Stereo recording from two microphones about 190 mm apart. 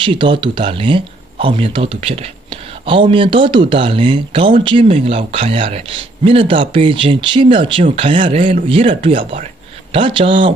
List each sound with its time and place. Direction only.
0.0 s speech: 25° right (ahead or behind)